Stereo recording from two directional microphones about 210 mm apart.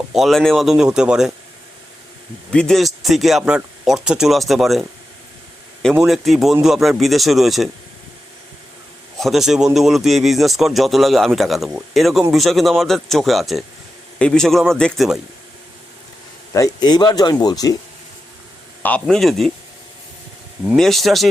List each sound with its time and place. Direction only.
0.1 s speech: centre (ahead or behind)
2.5 s speech: 5° left (ahead or behind)
9.1 s speech: centre (ahead or behind)
16.5 s speech: 15° left (ahead or behind)
18.8 s speech: 5° left (ahead or behind)
20.7 s speech: centre (ahead or behind)